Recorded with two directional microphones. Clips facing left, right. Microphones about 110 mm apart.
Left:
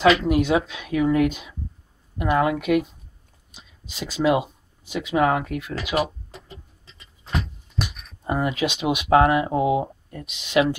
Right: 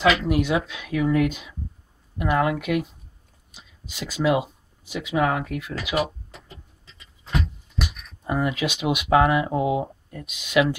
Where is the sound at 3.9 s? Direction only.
25° left (ahead or behind).